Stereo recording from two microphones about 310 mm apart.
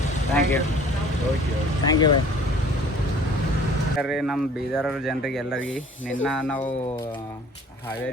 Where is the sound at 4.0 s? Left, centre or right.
Centre.